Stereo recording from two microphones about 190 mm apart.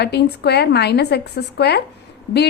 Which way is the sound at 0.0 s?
60° left (ahead or behind).